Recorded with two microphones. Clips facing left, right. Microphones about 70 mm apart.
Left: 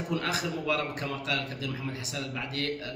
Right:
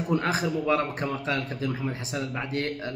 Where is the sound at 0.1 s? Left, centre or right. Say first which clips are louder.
Right 6 dB; right.